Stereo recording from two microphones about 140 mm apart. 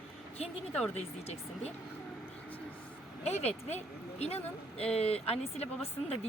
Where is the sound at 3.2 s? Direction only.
50° left (ahead or behind).